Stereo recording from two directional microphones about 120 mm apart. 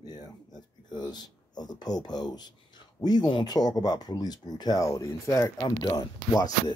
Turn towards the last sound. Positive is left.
turn(degrees=30)  # may be behind; listen again after turning